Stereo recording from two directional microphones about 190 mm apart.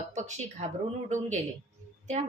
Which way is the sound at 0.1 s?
40° right (ahead or behind).